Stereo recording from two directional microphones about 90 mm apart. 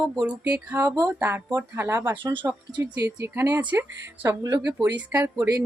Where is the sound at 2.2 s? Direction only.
65° right (ahead or behind).